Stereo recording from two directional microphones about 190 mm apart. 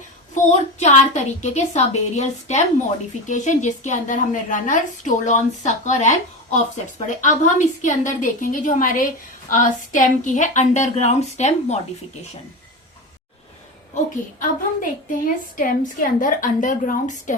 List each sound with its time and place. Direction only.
0.8 s a woman's voice: 40° left (ahead or behind)
13.9 s a woman's voice: 45° left (ahead or behind)